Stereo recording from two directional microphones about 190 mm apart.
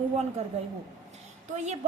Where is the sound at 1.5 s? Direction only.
35° right (ahead or behind).